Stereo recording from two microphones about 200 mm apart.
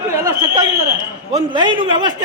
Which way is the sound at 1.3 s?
20° right (ahead or behind).